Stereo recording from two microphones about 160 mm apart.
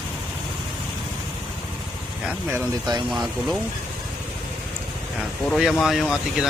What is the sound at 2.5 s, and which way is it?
Speech, 25° right (ahead or behind).